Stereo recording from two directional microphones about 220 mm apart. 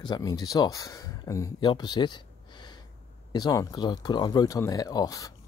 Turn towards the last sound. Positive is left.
turn(degrees=15)  # may be behind; listen again after turning